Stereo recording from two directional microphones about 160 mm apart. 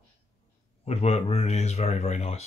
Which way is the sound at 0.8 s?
40° left (ahead or behind).